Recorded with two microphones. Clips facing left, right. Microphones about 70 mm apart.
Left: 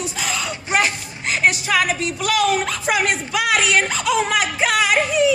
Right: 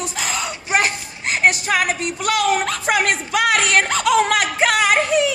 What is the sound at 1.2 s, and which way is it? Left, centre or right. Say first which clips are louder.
Music: right 1 dB; right.